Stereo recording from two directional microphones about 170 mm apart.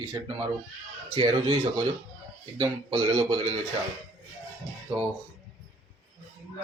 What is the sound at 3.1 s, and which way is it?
Speech, 30° right (ahead or behind).